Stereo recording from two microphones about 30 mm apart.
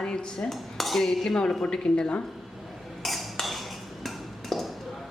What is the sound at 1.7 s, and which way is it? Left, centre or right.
Speech, left.